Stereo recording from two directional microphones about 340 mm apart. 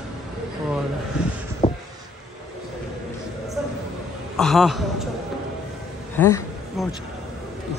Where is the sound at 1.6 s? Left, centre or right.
Centre.